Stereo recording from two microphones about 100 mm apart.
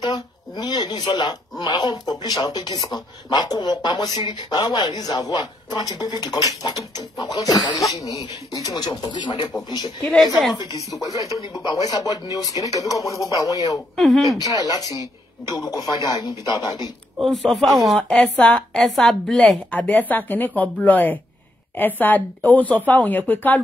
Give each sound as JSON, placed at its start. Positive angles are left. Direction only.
{"t": 0.0, "sound": "speech", "side_deg": 45}
{"t": 10.1, "sound": "speech", "side_deg": 0}
{"t": 10.5, "sound": "speech", "side_deg": 45}
{"t": 11.1, "sound": "speech", "side_deg": -30}
{"t": 11.5, "sound": "speech", "side_deg": 40}
{"t": 13.9, "sound": "speech", "side_deg": 0}
{"t": 14.7, "sound": "speech", "side_deg": 40}
{"t": 17.2, "sound": "speech", "side_deg": 0}
{"t": 19.7, "sound": "speech", "side_deg": 15}